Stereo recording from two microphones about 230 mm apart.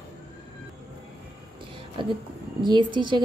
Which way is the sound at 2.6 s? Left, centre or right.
Centre.